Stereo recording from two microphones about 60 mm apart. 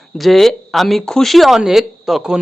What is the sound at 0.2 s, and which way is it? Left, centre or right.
Speech, centre.